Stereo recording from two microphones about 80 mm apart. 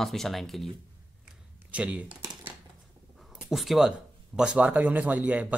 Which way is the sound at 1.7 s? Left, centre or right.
Centre.